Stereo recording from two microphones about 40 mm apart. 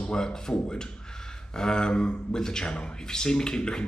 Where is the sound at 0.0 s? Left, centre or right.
Centre.